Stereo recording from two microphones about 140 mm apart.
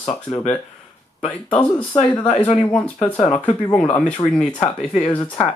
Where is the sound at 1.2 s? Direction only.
10° left (ahead or behind).